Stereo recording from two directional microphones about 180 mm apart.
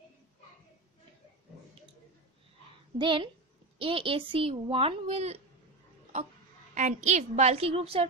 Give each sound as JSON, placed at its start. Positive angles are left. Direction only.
{"t": 3.0, "sound": "a woman's voice", "side_deg": -25}
{"t": 6.7, "sound": "a child's voice", "side_deg": -45}